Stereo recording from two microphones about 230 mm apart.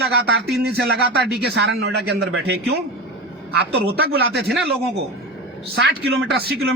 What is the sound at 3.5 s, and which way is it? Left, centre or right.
Speech, right.